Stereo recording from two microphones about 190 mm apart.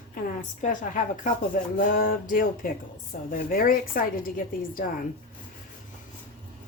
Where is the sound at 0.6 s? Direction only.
45° left (ahead or behind).